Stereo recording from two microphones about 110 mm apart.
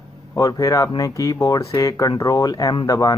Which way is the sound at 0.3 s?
30° left (ahead or behind).